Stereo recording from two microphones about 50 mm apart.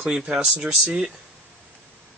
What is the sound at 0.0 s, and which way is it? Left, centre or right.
Speech, centre.